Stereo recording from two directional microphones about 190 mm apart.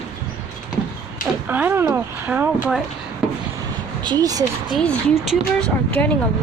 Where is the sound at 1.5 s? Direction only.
10° right (ahead or behind).